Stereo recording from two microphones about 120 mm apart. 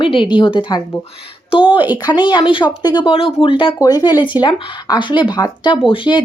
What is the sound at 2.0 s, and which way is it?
Speech, 40° left (ahead or behind).